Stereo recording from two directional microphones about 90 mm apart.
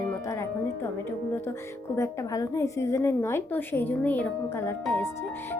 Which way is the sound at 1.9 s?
35° left (ahead or behind).